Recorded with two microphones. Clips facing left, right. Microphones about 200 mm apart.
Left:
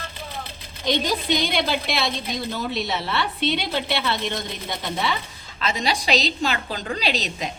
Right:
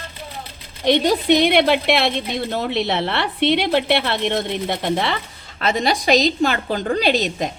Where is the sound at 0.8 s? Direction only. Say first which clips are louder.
Right 7 dB; 65° right (ahead or behind); by 7.5 s 50° right (ahead or behind).